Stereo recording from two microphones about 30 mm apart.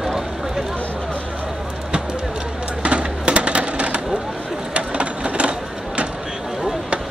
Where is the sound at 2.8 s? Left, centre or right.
Right.